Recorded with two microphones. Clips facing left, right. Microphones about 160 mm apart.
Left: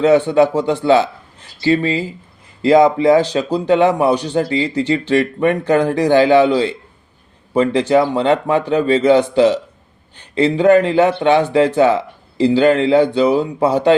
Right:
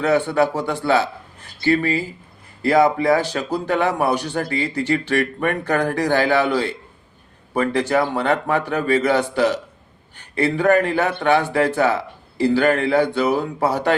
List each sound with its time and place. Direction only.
0.0 s speech: 20° left (ahead or behind)
7.5 s speech: 20° left (ahead or behind)